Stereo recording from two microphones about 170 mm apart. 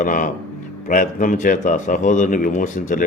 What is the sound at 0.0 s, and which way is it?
Speech, 50° left (ahead or behind).